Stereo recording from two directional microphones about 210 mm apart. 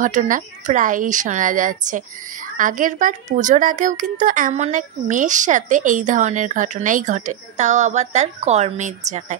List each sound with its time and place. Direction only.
0.0 s speech: 35° right (ahead or behind)